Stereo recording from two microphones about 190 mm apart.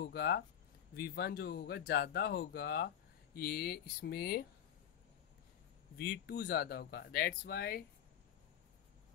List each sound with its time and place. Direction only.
0.1 s speech: 55° left (ahead or behind)
5.9 s speech: 55° left (ahead or behind)